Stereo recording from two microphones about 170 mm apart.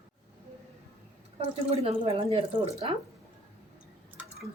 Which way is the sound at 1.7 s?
35° right (ahead or behind).